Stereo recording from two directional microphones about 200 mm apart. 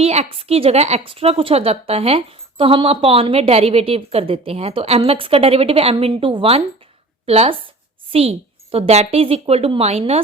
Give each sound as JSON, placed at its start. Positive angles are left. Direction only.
{"t": 0.0, "sound": "a woman's voice", "side_deg": -30}